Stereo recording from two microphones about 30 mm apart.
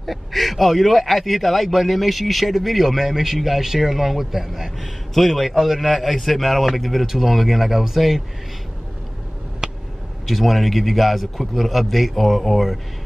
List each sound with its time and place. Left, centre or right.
0.0 s a man's voice: centre
5.1 s a man's voice: centre
9.6 s a sound: right
10.2 s speech: centre